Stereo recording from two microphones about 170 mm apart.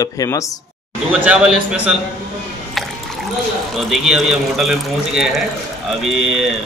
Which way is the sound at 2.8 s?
Centre (ahead or behind).